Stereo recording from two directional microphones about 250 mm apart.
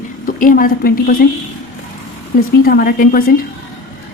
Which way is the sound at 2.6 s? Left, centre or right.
Left.